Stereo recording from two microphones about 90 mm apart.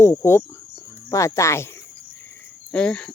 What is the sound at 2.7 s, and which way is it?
Speech, 10° left (ahead or behind).